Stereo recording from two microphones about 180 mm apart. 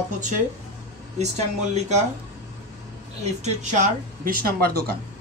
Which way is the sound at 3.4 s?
40° right (ahead or behind).